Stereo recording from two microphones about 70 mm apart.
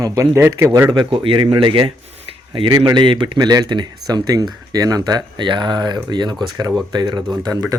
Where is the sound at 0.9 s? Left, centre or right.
Right.